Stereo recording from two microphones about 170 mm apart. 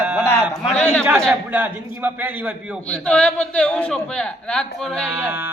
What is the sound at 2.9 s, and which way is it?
A man's voice, 5° left (ahead or behind).